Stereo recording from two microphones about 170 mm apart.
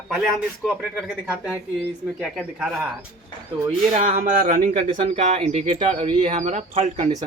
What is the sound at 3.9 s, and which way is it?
Speech, 45° right (ahead or behind).